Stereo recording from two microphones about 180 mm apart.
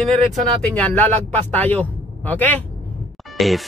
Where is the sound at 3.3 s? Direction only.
Centre (ahead or behind).